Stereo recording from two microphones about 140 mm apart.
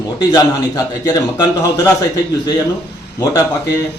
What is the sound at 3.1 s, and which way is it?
Speech, 25° left (ahead or behind).